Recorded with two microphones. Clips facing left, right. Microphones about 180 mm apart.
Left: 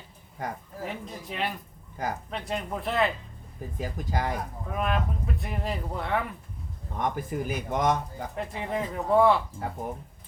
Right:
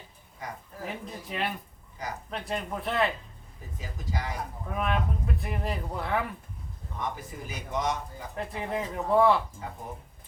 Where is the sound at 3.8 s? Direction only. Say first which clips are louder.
Left 6 dB; 55° left (ahead or behind).